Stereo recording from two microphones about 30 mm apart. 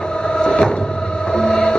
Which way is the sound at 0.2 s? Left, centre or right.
Left.